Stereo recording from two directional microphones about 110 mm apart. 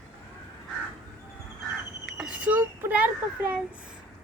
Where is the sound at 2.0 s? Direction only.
5° right (ahead or behind).